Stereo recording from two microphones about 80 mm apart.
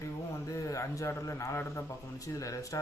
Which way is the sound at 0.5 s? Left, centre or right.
Left.